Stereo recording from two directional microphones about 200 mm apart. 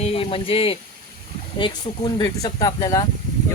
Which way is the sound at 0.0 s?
30° left (ahead or behind).